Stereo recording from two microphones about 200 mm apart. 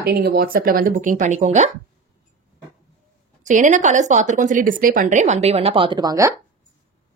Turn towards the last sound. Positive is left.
turn(degrees=-20)  # may be behind; listen again after turning